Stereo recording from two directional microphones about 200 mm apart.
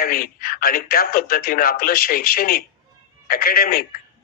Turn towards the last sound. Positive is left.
turn(degrees=50)  # may be behind; listen again after turning